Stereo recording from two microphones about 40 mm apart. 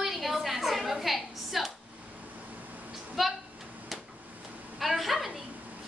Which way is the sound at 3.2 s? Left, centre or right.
Centre.